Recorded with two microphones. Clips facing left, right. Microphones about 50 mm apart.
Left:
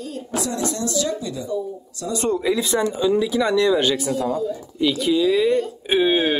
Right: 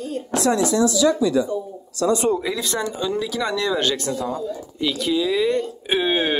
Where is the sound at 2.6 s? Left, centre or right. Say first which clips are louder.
Left 4 dB; centre.